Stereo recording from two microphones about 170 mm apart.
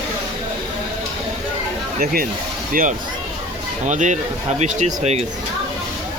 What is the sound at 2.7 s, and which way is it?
Speech, 50° right (ahead or behind).